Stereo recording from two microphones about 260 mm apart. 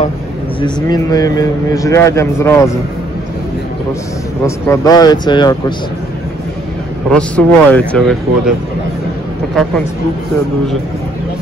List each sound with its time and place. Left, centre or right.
0.6 s a man's voice: centre
4.6 s a man's voice: centre
7.1 s speech: centre